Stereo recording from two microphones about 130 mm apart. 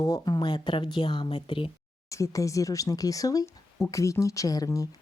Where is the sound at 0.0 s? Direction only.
30° left (ahead or behind).